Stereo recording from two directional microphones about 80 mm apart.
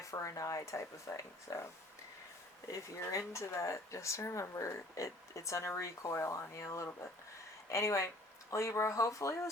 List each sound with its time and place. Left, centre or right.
0.0 s speech: left
2.7 s speech: left